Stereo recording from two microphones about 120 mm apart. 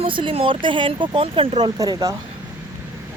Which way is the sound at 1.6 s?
30° right (ahead or behind).